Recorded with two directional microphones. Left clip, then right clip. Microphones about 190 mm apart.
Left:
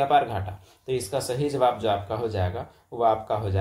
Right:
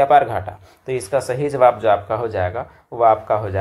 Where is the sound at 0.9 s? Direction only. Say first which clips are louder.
Right 7 dB; 5° right (ahead or behind).